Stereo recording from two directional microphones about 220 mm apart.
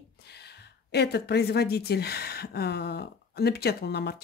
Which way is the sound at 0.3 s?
50° left (ahead or behind).